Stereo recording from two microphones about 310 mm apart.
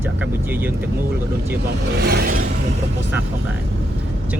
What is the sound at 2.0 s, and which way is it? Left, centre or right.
Vehicle, right.